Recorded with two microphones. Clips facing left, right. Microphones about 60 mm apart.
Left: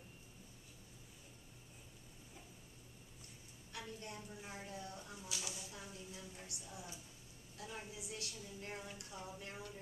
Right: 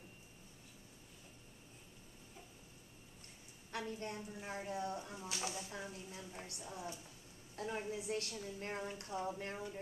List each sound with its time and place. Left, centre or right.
3.7 s a woman's voice: right